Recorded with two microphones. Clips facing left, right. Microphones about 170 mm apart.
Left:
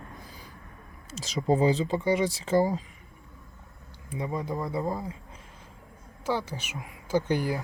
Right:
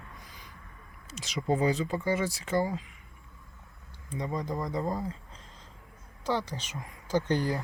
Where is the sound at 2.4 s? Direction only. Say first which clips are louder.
Left 5 dB; 35° left (ahead or behind).